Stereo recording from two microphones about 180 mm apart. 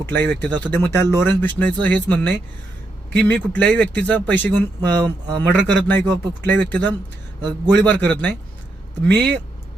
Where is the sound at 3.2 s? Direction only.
5° left (ahead or behind).